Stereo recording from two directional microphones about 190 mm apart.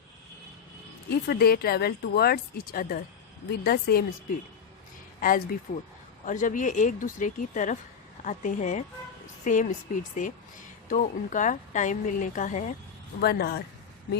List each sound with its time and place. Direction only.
1.1 s speech: 55° left (ahead or behind); by 12.7 s 40° left (ahead or behind)
13.2 s speech: 55° left (ahead or behind)